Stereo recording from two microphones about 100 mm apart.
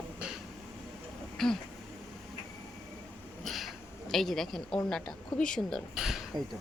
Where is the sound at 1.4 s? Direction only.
5° left (ahead or behind).